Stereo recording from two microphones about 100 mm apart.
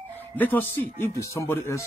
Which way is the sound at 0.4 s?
20° left (ahead or behind).